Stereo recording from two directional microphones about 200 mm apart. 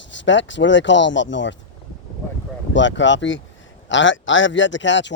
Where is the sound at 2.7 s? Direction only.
65° left (ahead or behind).